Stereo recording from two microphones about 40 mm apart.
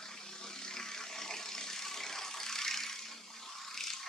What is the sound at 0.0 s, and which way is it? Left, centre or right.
Vehicle, centre.